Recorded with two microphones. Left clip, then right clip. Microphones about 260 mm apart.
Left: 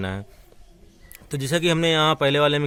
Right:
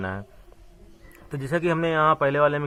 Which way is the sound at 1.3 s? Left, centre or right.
Left.